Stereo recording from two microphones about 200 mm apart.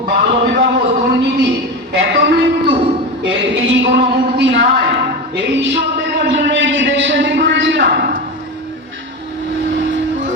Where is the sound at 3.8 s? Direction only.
55° right (ahead or behind).